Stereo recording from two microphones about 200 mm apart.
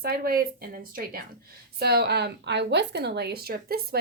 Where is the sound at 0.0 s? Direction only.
50° right (ahead or behind).